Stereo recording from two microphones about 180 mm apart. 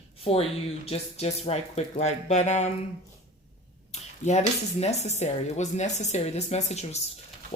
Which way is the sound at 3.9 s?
40° left (ahead or behind).